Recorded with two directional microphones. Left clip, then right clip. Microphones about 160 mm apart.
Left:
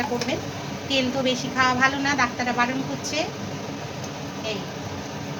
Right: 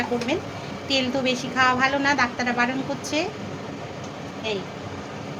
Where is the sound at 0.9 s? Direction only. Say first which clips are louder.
Even; 55° right (ahead or behind).